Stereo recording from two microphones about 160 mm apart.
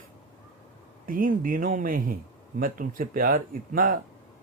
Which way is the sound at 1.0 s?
60° right (ahead or behind).